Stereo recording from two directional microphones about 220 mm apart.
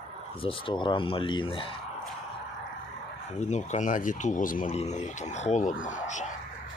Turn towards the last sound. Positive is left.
turn(degrees=35)  # may be behind; listen again after turning